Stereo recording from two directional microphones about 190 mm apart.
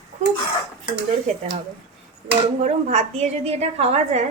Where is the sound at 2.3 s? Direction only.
35° right (ahead or behind).